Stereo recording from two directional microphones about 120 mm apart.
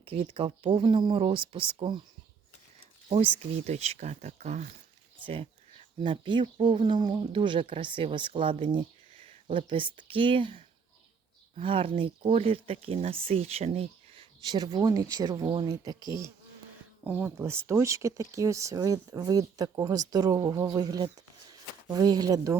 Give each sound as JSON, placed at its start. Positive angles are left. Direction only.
{"t": 0.0, "sound": "speech", "side_deg": -50}
{"t": 3.7, "sound": "speech", "side_deg": -65}
{"t": 5.2, "sound": "speech", "side_deg": -50}
{"t": 11.6, "sound": "speech", "side_deg": -50}
{"t": 14.4, "sound": "speech", "side_deg": -35}
{"t": 15.4, "sound": "speech", "side_deg": -50}
{"t": 15.7, "sound": "speech", "side_deg": -30}
{"t": 17.0, "sound": "speech", "side_deg": -15}